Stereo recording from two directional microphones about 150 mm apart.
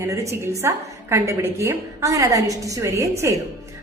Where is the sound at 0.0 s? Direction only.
20° right (ahead or behind).